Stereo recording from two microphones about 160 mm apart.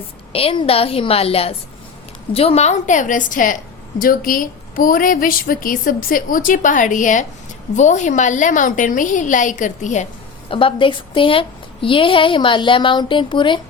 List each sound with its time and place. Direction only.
0.3 s a woman's voice: 35° left (ahead or behind)
10.5 s a woman's voice: 35° left (ahead or behind)